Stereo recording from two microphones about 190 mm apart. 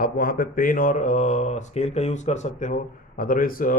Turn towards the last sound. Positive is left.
turn(degrees=45)  # may be behind; listen again after turning